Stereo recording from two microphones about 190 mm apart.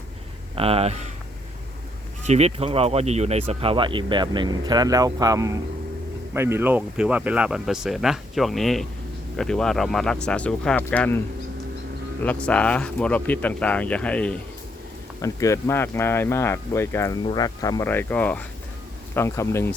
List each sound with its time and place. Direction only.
0.5 s speech: 30° right (ahead or behind)
2.2 s speech: 35° right (ahead or behind); by 11.2 s 10° left (ahead or behind)
12.2 s speech: 5° left (ahead or behind)
15.2 s speech: 15° left (ahead or behind)